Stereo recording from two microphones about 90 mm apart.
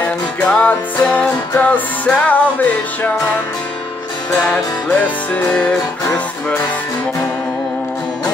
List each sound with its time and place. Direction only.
0.0 s music: 15° left (ahead or behind)
4.4 s music: 15° left (ahead or behind)